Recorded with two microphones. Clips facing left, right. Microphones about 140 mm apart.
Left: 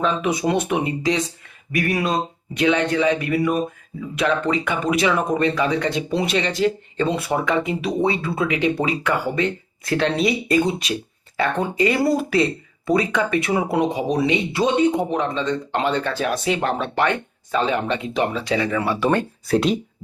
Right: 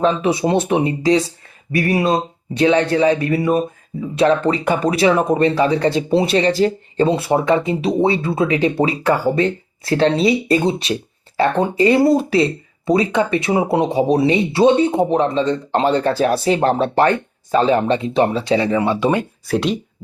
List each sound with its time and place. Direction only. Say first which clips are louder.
0.0 s speech: right 4 dB; 30° right (ahead or behind)
18.8 s speech: right 3 dB; 20° right (ahead or behind)
19.5 s speech: even; centre (ahead or behind)